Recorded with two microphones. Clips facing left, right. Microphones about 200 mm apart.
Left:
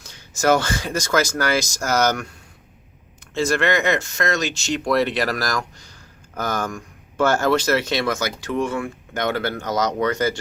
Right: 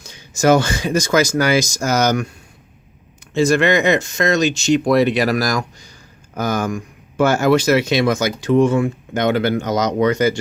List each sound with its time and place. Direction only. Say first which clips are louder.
0.0 s speech: right 4 dB; 15° right (ahead or behind)
3.3 s speech: right 5 dB; 15° right (ahead or behind)